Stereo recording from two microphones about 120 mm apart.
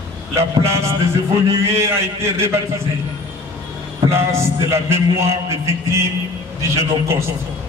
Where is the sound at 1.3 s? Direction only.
25° right (ahead or behind).